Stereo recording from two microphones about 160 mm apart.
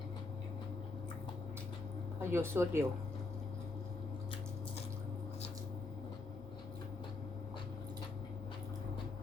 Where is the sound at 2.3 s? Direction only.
15° right (ahead or behind).